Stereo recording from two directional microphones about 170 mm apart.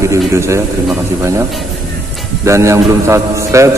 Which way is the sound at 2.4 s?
15° right (ahead or behind).